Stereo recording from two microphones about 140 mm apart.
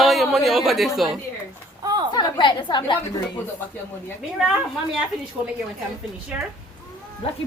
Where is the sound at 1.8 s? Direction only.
30° right (ahead or behind).